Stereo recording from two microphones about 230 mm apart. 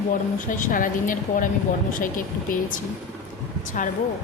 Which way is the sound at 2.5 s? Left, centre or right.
Left.